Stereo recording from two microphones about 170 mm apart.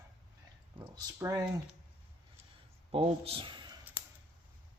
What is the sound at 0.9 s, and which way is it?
Speech, 20° right (ahead or behind).